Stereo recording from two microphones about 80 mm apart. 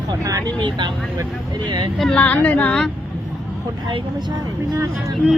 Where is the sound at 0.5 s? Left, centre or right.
Right.